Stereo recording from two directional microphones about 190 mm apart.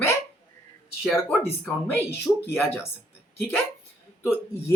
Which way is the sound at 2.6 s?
10° left (ahead or behind).